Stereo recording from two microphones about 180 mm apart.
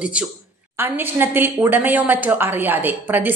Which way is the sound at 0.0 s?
5° right (ahead or behind).